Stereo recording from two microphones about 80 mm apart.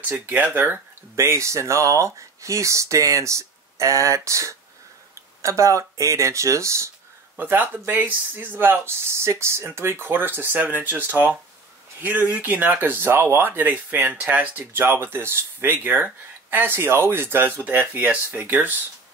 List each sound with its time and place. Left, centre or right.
0.1 s speech: right
1.1 s speech: right
7.3 s speech: right